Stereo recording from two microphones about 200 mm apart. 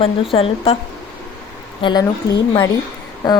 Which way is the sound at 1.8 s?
25° left (ahead or behind).